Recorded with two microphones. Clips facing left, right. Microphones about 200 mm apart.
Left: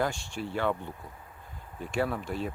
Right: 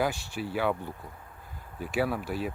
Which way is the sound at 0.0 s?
5° right (ahead or behind).